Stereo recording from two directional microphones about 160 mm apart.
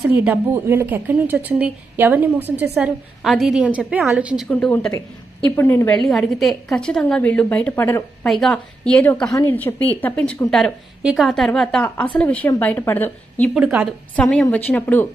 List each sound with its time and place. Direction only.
0.1 s a woman's voice: 15° right (ahead or behind)
4.5 s a woman's voice: 10° left (ahead or behind)
6.0 s a woman's voice: centre (ahead or behind)
8.3 s a woman's voice: 5° left (ahead or behind)
13.6 s a woman's voice: 10° right (ahead or behind)
14.1 s a woman's voice: 5° left (ahead or behind)